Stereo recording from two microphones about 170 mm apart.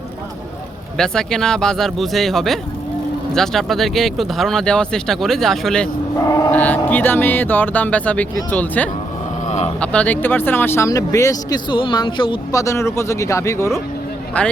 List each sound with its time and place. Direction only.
0.9 s speech: 5° left (ahead or behind)
6.1 s speech: 20° left (ahead or behind)
6.5 s speech: 10° left (ahead or behind)
9.5 s speech: 40° left (ahead or behind)
9.8 s speech: 5° left (ahead or behind)